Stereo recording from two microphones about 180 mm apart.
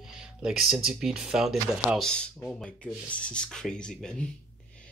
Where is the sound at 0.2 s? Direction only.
5° right (ahead or behind).